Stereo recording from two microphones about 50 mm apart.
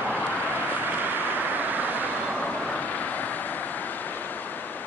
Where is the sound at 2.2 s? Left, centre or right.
Left.